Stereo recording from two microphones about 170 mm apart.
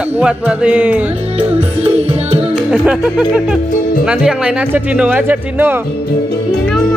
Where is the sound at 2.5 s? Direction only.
5° right (ahead or behind).